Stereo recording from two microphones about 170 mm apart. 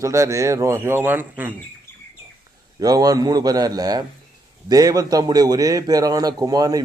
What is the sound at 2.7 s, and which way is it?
A man's voice, 20° right (ahead or behind).